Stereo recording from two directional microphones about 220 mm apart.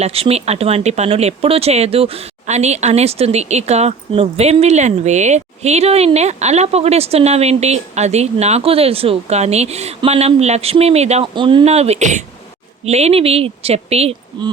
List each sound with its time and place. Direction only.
0.0 s speech: 25° right (ahead or behind)